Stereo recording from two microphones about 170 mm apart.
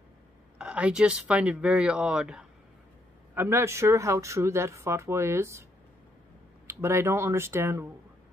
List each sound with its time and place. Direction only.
0.6 s speech: 5° right (ahead or behind)
6.7 s speech: 15° right (ahead or behind)